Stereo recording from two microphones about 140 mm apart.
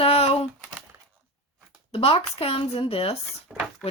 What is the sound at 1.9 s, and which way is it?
Speech, 40° left (ahead or behind).